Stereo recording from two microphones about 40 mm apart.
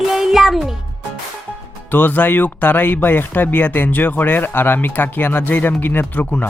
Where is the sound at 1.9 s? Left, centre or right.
Left.